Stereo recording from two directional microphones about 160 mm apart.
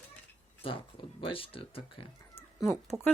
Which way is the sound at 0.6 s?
35° left (ahead or behind).